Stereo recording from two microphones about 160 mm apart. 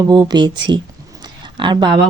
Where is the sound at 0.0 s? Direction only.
25° right (ahead or behind).